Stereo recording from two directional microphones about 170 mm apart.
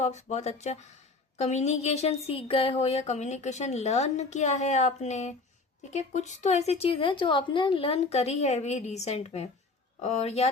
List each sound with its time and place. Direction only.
0.0 s speech: 40° left (ahead or behind)